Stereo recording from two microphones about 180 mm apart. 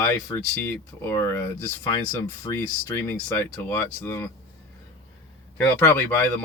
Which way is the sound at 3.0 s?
10° left (ahead or behind).